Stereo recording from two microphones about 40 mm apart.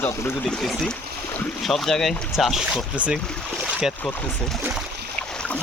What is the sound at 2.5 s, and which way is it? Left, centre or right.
Speech, centre.